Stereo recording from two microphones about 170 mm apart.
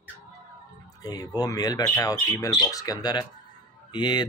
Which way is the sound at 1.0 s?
20° left (ahead or behind).